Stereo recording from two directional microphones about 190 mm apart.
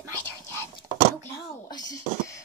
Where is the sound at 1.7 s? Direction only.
20° left (ahead or behind).